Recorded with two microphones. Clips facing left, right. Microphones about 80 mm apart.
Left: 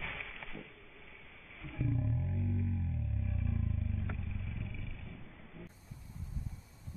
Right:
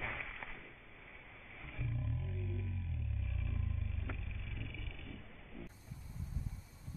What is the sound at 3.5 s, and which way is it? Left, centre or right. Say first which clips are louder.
Vehicle: left 6 dB; centre.